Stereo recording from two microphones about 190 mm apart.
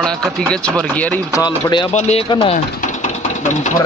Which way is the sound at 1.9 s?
35° left (ahead or behind).